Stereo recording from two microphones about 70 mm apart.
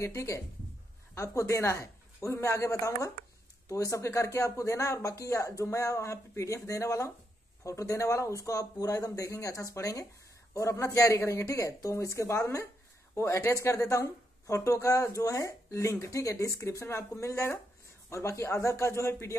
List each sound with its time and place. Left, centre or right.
0.0 s speech: left
11.1 s speech: left